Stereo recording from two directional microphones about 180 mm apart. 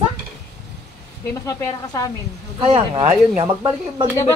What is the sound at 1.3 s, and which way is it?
Speech, 20° left (ahead or behind).